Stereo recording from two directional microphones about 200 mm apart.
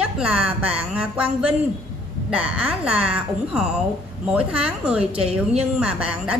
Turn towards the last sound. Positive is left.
turn(degrees=-5)  # may be behind; listen again after turning